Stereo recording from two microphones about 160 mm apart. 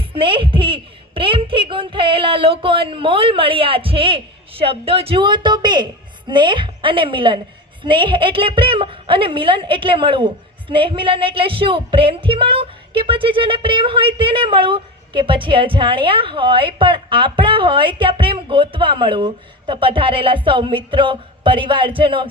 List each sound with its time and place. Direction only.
0.1 s a woman's voice: 35° right (ahead or behind)